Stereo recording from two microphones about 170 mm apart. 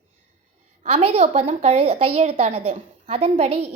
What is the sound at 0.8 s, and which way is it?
A child's voice, 40° right (ahead or behind).